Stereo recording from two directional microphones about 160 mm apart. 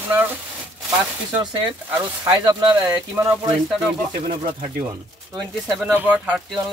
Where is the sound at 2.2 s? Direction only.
25° right (ahead or behind).